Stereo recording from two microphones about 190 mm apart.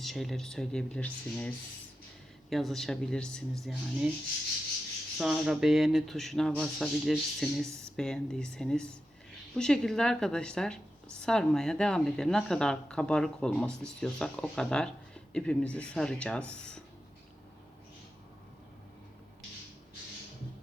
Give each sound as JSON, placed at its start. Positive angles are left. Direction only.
{"t": 0.0, "sound": "speech", "side_deg": 0}
{"t": 5.1, "sound": "speech", "side_deg": 0}